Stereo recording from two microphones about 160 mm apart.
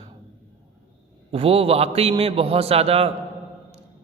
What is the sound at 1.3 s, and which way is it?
A man's voice, 35° right (ahead or behind).